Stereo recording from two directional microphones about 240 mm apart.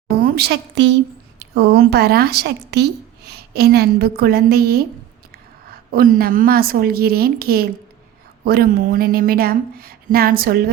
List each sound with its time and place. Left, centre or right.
0.2 s a woman's voice: right
5.9 s a woman's voice: right